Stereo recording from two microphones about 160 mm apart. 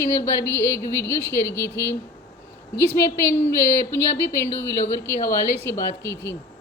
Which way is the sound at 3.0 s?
15° left (ahead or behind).